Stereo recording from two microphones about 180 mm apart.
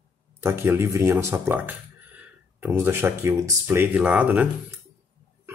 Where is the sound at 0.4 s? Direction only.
15° right (ahead or behind).